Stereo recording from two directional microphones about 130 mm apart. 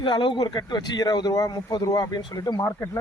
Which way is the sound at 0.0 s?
35° left (ahead or behind).